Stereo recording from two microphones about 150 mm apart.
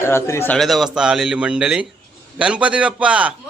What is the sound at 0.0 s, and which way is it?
Speech, 15° left (ahead or behind).